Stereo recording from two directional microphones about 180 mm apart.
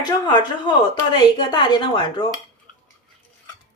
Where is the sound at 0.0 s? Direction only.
25° left (ahead or behind).